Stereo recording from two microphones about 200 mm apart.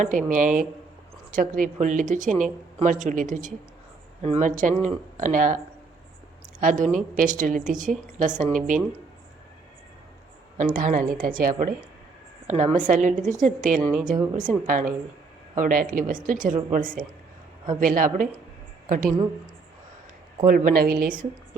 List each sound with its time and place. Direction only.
0.0 s a woman's voice: 40° right (ahead or behind)
6.6 s a woman's voice: 40° right (ahead or behind)
10.6 s a woman's voice: 40° right (ahead or behind)
14.2 s a woman's voice: 20° right (ahead or behind)
14.7 s a woman's voice: 40° right (ahead or behind)
20.4 s a woman's voice: 40° right (ahead or behind)